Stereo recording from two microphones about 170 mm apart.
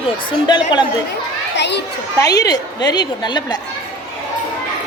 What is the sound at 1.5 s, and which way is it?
Speech, 90° left.